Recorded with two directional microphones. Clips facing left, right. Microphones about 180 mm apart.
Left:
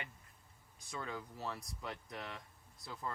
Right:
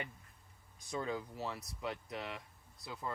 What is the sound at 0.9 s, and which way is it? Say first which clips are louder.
Speech: right 5 dB; 15° right (ahead or behind).